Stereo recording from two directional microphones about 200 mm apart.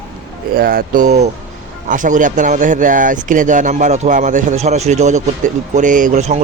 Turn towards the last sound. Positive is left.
turn(degrees=-35)  # may be behind; listen again after turning